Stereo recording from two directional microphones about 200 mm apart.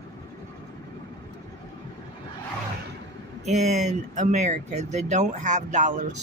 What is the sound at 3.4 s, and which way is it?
Speech, 35° right (ahead or behind).